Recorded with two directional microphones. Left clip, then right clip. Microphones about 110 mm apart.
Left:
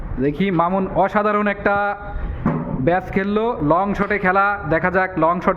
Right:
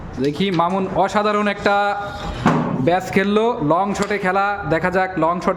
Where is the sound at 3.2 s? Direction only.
25° right (ahead or behind).